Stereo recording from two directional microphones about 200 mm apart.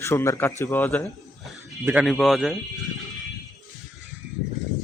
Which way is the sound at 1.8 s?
5° right (ahead or behind).